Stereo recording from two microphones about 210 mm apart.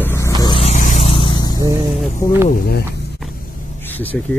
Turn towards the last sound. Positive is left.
turn(degrees=10)  # may be behind; listen again after turning